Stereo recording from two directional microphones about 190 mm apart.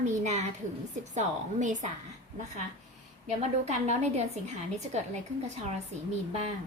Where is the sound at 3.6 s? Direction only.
35° right (ahead or behind).